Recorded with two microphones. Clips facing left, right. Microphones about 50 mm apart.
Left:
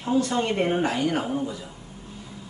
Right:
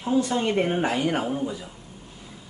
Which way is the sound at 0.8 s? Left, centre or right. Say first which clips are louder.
Even; centre.